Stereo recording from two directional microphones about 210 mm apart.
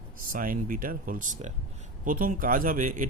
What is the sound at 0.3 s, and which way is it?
Speech, 40° right (ahead or behind).